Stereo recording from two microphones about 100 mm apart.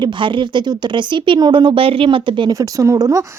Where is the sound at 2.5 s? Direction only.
35° right (ahead or behind).